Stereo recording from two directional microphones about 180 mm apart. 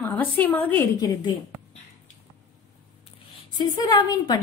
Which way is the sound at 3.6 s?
25° left (ahead or behind).